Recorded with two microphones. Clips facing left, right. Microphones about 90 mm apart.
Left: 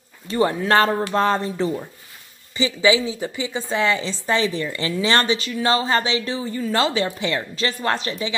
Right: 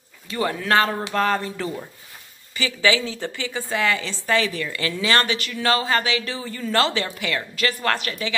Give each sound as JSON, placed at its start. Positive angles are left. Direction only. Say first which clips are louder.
{"t": 0.3, "sound": "a woman's voice", "louder": "left 3 dB", "side_deg": 30}